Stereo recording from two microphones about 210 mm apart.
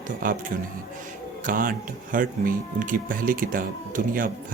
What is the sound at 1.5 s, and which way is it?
Speech, 40° right (ahead or behind).